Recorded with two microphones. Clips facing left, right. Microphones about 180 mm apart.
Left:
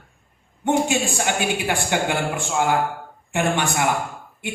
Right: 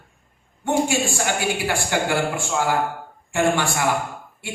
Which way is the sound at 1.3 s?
20° left (ahead or behind).